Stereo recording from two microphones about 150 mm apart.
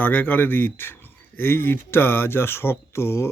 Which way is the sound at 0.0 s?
10° left (ahead or behind).